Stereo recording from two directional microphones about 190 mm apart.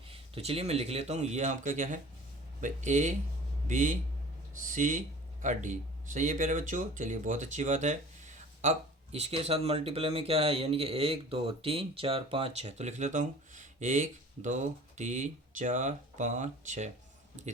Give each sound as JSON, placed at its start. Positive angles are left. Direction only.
{"t": 0.1, "sound": "speech", "side_deg": -30}